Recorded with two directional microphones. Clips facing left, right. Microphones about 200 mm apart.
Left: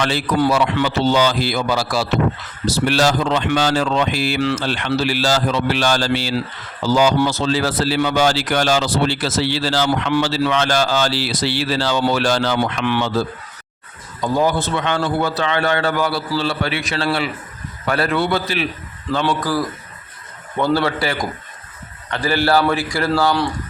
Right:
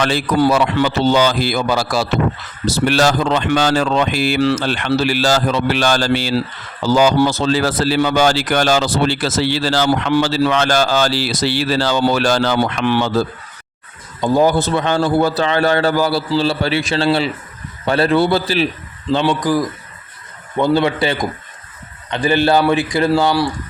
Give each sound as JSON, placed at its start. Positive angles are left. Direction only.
{"t": 0.0, "sound": "a man's voice", "side_deg": -40}
{"t": 4.4, "sound": "a man's voice", "side_deg": -35}
{"t": 4.6, "sound": "speech", "side_deg": -55}
{"t": 12.5, "sound": "a man's voice", "side_deg": -35}
{"t": 14.3, "sound": "a man's voice", "side_deg": -40}
{"t": 19.3, "sound": "a man's voice", "side_deg": -15}